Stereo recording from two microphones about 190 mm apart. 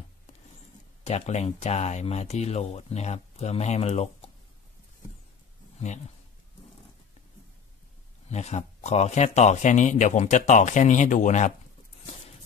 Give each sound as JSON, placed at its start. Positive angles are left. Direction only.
{"t": 1.0, "sound": "speech", "side_deg": 35}
{"t": 5.8, "sound": "speech", "side_deg": 35}
{"t": 8.3, "sound": "speech", "side_deg": 35}